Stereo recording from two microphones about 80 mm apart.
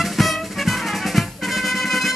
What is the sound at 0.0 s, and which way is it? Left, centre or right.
Music, centre.